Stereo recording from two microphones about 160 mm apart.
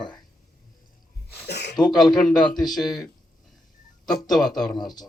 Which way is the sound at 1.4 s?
90° left.